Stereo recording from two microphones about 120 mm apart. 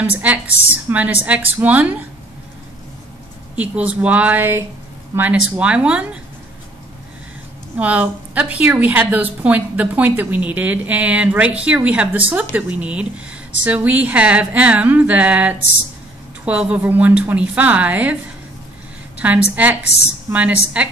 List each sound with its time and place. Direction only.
0.0 s a woman's voice: 15° right (ahead or behind)
3.5 s a woman's voice: 10° right (ahead or behind)
7.7 s a woman's voice: 10° right (ahead or behind)
19.1 s a woman's voice: 10° right (ahead or behind)